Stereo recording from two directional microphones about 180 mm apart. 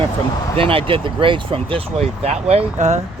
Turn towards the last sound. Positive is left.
turn(degrees=-40)  # may be behind; listen again after turning